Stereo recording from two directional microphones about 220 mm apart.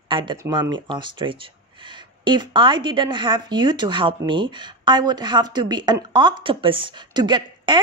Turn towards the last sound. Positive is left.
turn(degrees=-20)  # may be behind; listen again after turning